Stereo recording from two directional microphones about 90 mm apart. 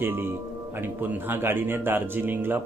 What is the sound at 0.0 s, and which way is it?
Speech, 25° right (ahead or behind).